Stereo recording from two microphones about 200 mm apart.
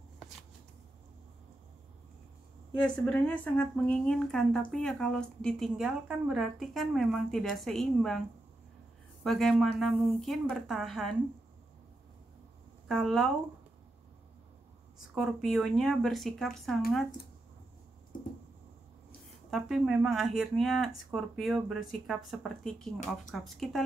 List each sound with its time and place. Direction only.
2.8 s speech: 5° left (ahead or behind)
9.2 s speech: centre (ahead or behind)
12.8 s speech: centre (ahead or behind)
15.1 s speech: centre (ahead or behind)
18.1 s a sound: 45° left (ahead or behind)
19.5 s speech: 5° right (ahead or behind)